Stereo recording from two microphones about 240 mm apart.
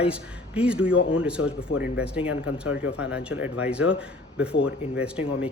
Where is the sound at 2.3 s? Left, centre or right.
Left.